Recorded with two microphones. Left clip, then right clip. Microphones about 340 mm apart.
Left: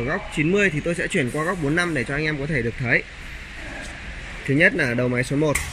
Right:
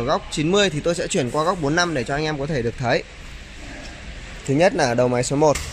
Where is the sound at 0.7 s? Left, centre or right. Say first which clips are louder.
Right 1 dB; right.